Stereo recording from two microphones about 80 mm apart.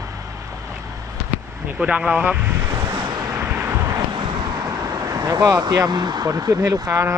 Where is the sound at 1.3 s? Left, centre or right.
Centre.